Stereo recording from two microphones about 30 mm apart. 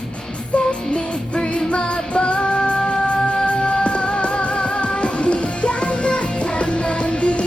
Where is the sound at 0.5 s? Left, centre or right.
Left.